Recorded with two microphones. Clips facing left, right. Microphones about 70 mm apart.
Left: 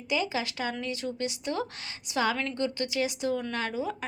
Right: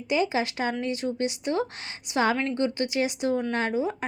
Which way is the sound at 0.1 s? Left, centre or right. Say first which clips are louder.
Right 5 dB; right.